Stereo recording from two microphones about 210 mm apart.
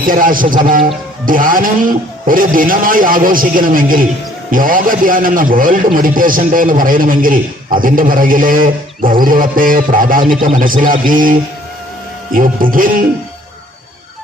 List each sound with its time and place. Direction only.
0.0 s a man's voice: 40° right (ahead or behind)